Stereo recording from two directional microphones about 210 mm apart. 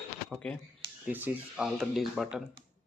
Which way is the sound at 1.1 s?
10° right (ahead or behind).